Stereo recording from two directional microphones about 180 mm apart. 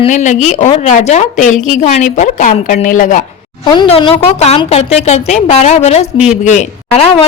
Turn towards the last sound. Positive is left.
turn(degrees=35)  # may be behind; listen again after turning